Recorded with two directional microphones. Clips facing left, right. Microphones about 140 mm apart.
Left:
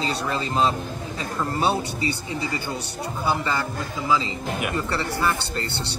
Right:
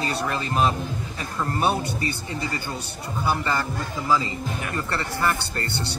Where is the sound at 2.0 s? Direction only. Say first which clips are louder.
Left 2 dB; 20° left (ahead or behind).